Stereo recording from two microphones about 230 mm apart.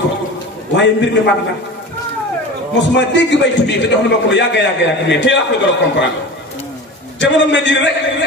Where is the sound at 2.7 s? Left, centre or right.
Left.